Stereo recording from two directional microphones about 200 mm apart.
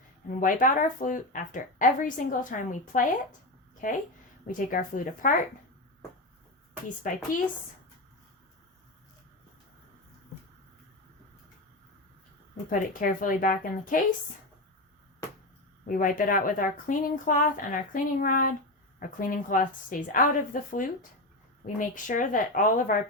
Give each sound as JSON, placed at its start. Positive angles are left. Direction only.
{"t": 0.3, "sound": "speech", "side_deg": 40}
{"t": 7.1, "sound": "speech", "side_deg": 40}
{"t": 12.8, "sound": "speech", "side_deg": 45}
{"t": 15.9, "sound": "speech", "side_deg": 45}